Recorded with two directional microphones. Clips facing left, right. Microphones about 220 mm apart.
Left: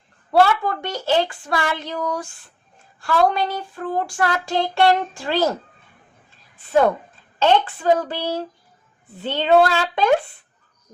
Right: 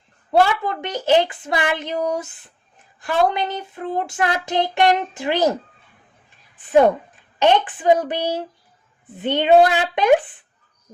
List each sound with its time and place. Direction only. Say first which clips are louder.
0.3 s child singing: left 1 dB; 20° right (ahead or behind)
7.3 s speech: right 1 dB; 15° right (ahead or behind)